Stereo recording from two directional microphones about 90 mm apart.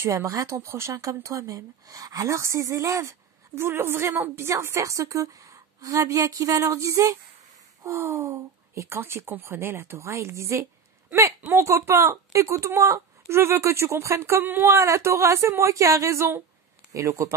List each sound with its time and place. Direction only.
0.0 s speech: 35° right (ahead or behind)